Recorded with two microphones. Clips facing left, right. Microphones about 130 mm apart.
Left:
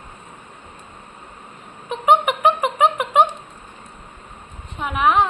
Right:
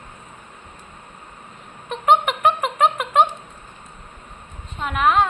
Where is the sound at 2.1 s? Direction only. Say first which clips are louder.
Left 1 dB; 10° left (ahead or behind).